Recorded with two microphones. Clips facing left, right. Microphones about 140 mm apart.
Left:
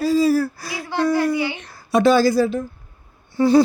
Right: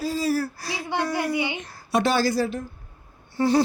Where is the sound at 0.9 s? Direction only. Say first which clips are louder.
Left 7 dB; 20° right (ahead or behind).